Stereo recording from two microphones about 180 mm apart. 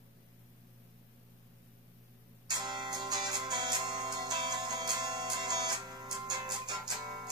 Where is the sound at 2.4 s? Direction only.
25° right (ahead or behind).